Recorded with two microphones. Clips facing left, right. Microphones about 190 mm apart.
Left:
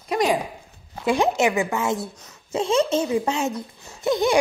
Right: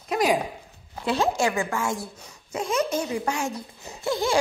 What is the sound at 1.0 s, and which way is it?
A woman's voice, 15° left (ahead or behind).